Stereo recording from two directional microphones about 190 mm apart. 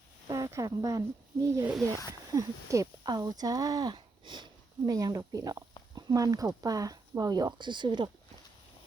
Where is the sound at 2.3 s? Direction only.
15° right (ahead or behind).